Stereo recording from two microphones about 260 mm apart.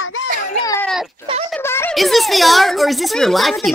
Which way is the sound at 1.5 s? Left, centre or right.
Centre.